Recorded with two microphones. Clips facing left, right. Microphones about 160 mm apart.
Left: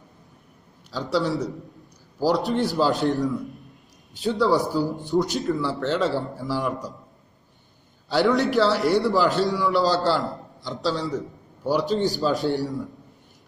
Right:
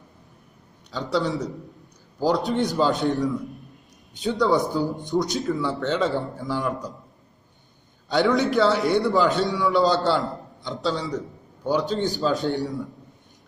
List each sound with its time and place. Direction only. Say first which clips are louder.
0.9 s a man's voice: left 1 dB; centre (ahead or behind)
4.8 s a man's voice: even; 20° right (ahead or behind)
5.1 s a man's voice: left 2 dB; centre (ahead or behind)
8.1 s a man's voice: even; centre (ahead or behind)